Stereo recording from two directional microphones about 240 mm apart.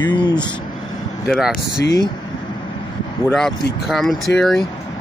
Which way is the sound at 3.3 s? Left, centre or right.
Centre.